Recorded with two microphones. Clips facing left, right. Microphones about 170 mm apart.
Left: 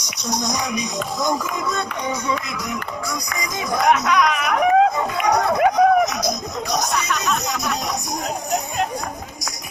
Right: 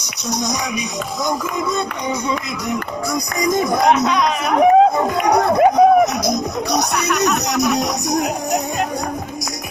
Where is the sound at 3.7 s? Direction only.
30° right (ahead or behind).